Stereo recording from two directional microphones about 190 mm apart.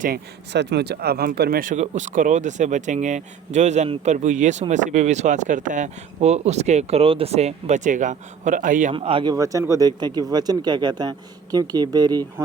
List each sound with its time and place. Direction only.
0.0 s speech: 60° right (ahead or behind)
8.9 s speech: 30° right (ahead or behind)